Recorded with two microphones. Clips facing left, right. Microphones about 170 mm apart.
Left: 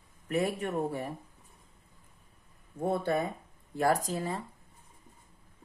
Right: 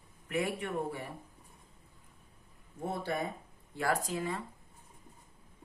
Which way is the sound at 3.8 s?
40° left (ahead or behind).